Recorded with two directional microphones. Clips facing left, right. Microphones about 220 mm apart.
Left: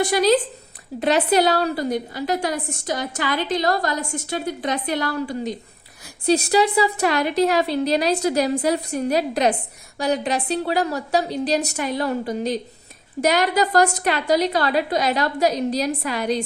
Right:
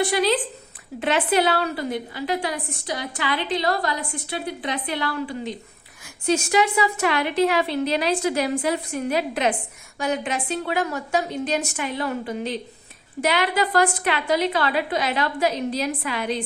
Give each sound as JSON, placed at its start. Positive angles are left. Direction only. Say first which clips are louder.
{"t": 0.0, "sound": "a woman's voice", "louder": "left 4 dB", "side_deg": 45}